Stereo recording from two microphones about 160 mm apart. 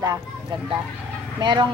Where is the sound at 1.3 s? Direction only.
30° right (ahead or behind).